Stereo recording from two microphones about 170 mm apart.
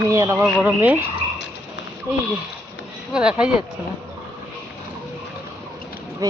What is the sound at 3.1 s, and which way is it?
Speech, 5° right (ahead or behind).